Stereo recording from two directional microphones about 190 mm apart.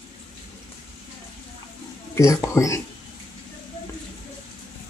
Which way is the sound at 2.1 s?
15° left (ahead or behind).